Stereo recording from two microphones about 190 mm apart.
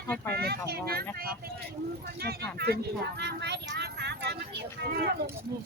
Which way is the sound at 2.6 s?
55° right (ahead or behind).